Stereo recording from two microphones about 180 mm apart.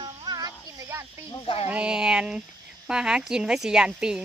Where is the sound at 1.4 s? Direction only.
30° left (ahead or behind).